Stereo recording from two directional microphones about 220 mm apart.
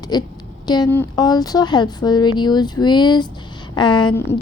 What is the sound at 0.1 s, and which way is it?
A woman's voice, 20° left (ahead or behind).